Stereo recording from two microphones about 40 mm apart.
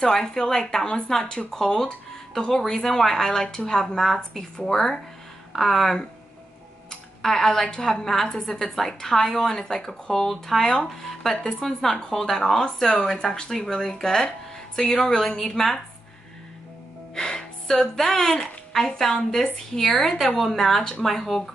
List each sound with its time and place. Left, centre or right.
0.0 s a woman's voice: centre
7.2 s a woman's voice: centre
17.1 s a woman's voice: centre
20.0 s a woman's voice: centre